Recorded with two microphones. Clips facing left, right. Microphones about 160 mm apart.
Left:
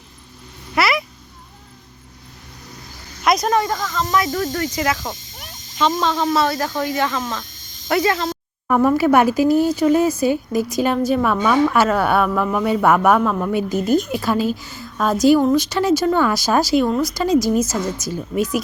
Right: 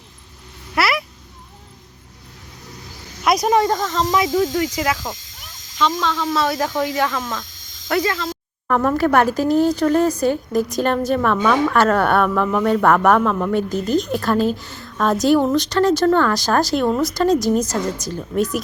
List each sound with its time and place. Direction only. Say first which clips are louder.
0.8 s a sound: left 1 dB; 5° right (ahead or behind)
3.2 s speech: right 1 dB; 10° right (ahead or behind)
3.6 s speech: right 3 dB; 25° right (ahead or behind); by 5.1 s centre (ahead or behind)
6.5 s speech: right 1 dB; 5° right (ahead or behind)